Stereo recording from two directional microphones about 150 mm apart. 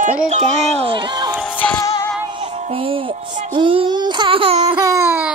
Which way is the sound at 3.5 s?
35° right (ahead or behind).